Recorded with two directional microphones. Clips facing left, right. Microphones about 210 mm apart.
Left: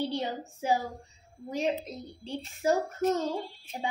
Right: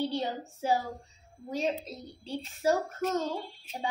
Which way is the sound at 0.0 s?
15° left (ahead or behind).